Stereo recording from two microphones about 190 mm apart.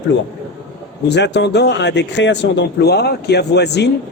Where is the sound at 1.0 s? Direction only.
65° left (ahead or behind).